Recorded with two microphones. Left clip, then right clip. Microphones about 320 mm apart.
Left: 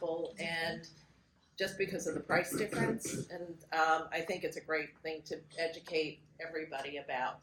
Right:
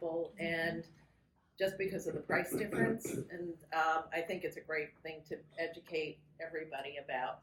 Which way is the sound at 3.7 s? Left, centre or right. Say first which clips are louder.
Left 3 dB; centre.